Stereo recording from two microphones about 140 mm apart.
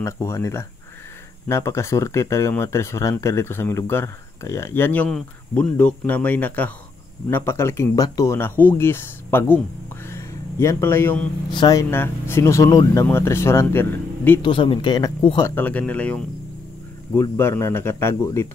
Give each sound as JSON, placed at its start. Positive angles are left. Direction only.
{"t": 0.0, "sound": "speech", "side_deg": 20}
{"t": 11.5, "sound": "speech", "side_deg": 30}
{"t": 11.9, "sound": "speech", "side_deg": 15}
{"t": 14.4, "sound": "speech", "side_deg": 35}
{"t": 15.4, "sound": "speech", "side_deg": 15}